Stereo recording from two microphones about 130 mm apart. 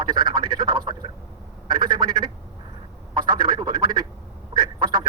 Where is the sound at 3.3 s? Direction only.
35° right (ahead or behind).